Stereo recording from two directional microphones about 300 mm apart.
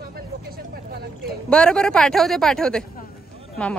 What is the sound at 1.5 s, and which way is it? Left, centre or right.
A woman's voice, centre.